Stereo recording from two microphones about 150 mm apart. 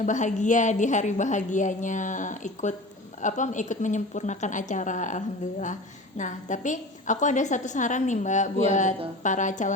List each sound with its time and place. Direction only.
0.0 s a woman's voice: 55° left (ahead or behind)